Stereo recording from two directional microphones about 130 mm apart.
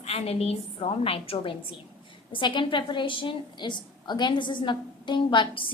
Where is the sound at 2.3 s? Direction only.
35° left (ahead or behind).